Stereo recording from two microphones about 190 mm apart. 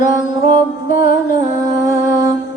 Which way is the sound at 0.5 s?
45° left (ahead or behind).